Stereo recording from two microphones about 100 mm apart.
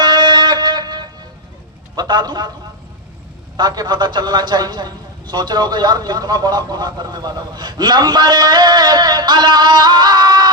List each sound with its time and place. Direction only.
0.0 s music: 50° right (ahead or behind)
2.0 s speech: 45° right (ahead or behind)
3.6 s speech: 45° right (ahead or behind)